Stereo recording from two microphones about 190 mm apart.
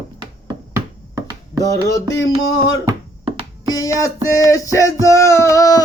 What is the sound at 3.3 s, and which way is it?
Music, 30° right (ahead or behind).